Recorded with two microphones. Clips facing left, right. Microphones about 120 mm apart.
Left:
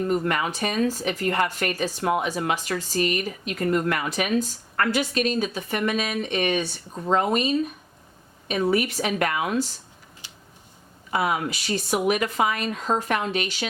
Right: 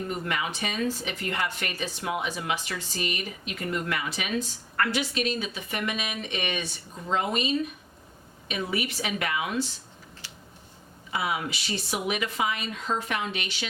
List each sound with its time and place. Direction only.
0.1 s speech: 45° left (ahead or behind)
10.2 s a sound: 20° left (ahead or behind)
11.1 s speech: 50° left (ahead or behind)